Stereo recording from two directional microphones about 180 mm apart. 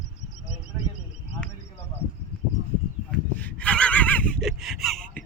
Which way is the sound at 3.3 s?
10° left (ahead or behind).